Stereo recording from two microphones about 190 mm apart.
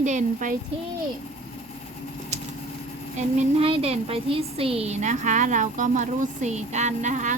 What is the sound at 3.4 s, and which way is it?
A woman's voice, 30° right (ahead or behind).